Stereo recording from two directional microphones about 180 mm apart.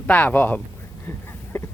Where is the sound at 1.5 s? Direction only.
10° left (ahead or behind).